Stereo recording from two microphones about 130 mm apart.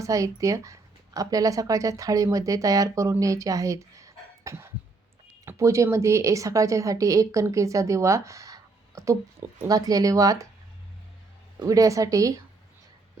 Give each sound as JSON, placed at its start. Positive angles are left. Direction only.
{"t": 0.0, "sound": "a woman's voice", "side_deg": -25}
{"t": 11.6, "sound": "a woman's voice", "side_deg": -25}